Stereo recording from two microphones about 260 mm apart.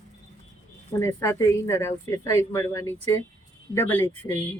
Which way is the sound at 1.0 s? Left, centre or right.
Centre.